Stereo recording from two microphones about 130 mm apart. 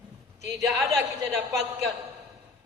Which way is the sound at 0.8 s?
25° right (ahead or behind).